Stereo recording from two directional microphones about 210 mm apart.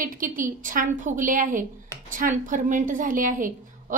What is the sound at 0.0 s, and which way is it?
A woman's voice, 40° right (ahead or behind).